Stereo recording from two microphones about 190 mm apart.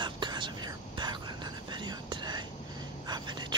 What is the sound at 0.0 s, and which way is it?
Whispering, 25° right (ahead or behind).